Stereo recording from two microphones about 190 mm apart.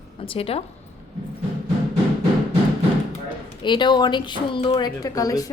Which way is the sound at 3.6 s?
25° left (ahead or behind).